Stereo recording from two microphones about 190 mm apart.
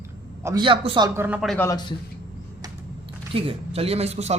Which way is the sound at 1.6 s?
20° left (ahead or behind).